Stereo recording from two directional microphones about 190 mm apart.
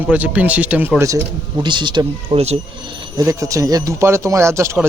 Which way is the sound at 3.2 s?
15° right (ahead or behind).